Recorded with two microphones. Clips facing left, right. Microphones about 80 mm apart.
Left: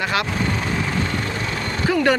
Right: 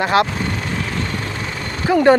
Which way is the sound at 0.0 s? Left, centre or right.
Right.